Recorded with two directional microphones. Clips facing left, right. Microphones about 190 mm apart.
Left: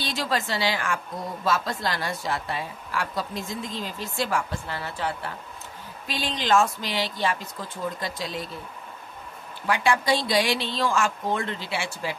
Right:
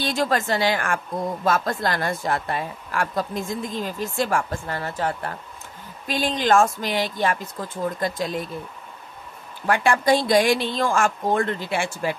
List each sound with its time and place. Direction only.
0.0 s a woman's voice: 50° right (ahead or behind)
9.7 s a woman's voice: 50° right (ahead or behind)